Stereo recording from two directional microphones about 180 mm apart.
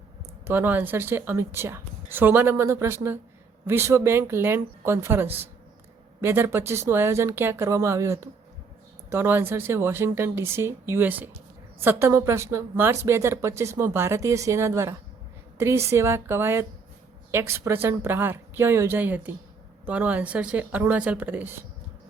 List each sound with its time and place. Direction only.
0.4 s a woman's voice: 10° right (ahead or behind)